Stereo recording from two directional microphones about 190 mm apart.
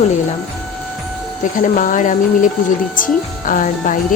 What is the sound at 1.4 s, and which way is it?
Speech, 40° left (ahead or behind).